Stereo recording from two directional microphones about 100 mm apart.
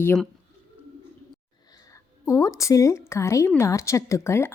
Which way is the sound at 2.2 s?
30° left (ahead or behind).